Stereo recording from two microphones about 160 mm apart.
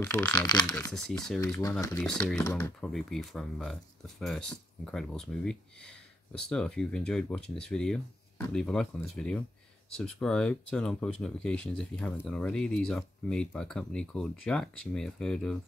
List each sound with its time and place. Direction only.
0.0 s speech: 15° left (ahead or behind)
0.3 s speech: 25° left (ahead or behind)
0.9 s speech: 5° left (ahead or behind)
1.4 s speech: 20° left (ahead or behind)
2.0 s speech: 5° left (ahead or behind)
2.9 s speech: centre (ahead or behind)